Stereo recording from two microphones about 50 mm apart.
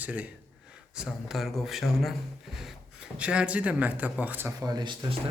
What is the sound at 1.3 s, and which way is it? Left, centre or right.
Speech, centre.